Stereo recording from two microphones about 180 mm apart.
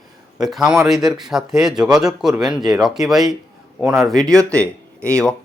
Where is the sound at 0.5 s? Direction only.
5° right (ahead or behind).